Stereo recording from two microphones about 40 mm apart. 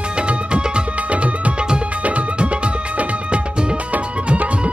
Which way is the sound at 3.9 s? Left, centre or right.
Right.